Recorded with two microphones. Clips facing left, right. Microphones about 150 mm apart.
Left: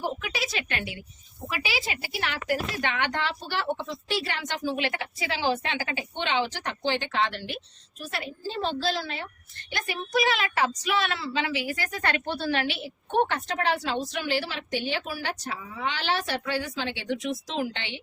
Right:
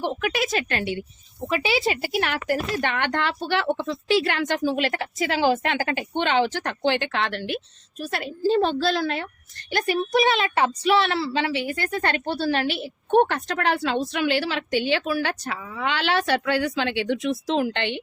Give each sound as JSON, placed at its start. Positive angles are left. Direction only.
{"t": 0.0, "sound": "speech", "side_deg": -60}
{"t": 0.8, "sound": "a woman's voice", "side_deg": -30}
{"t": 2.0, "sound": "speech", "side_deg": -50}
{"t": 4.6, "sound": "a woman's voice", "side_deg": -40}
{"t": 8.0, "sound": "a woman's voice", "side_deg": -45}
{"t": 9.7, "sound": "a child's voice", "side_deg": -25}
{"t": 13.7, "sound": "speech", "side_deg": -55}
{"t": 14.1, "sound": "speech", "side_deg": -70}